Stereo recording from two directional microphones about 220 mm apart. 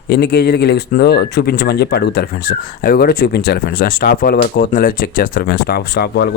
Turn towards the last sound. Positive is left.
turn(degrees=45)  # may be behind; listen again after turning